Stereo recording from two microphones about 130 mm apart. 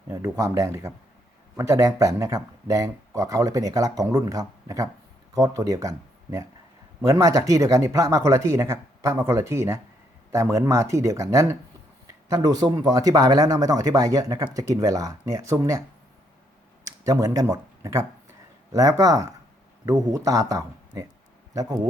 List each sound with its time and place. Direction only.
0.1 s speech: 25° right (ahead or behind)
17.0 s speech: 25° right (ahead or behind)